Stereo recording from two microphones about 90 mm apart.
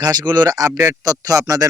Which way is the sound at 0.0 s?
50° right (ahead or behind).